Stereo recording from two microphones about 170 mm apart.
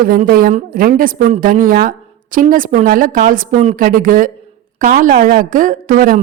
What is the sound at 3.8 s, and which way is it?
A woman's voice, 55° right (ahead or behind).